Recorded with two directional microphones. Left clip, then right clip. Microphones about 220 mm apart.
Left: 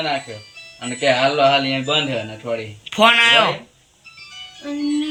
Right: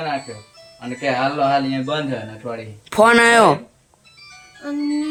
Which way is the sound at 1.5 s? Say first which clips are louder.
Left 2 dB; 5° right (ahead or behind).